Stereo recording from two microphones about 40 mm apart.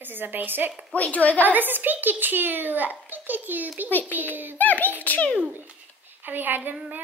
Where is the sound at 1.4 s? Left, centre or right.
Right.